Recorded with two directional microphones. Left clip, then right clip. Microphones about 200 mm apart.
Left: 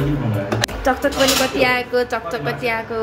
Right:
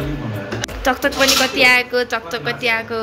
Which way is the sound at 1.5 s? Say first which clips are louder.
Right 4 dB; 5° right (ahead or behind).